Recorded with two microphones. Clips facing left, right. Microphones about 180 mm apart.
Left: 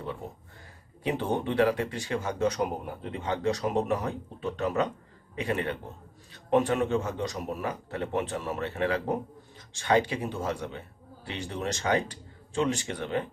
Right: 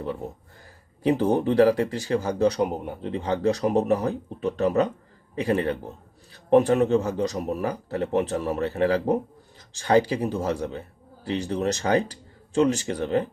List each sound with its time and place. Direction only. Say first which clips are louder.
1.0 s a man's voice: right 7 dB; 40° right (ahead or behind)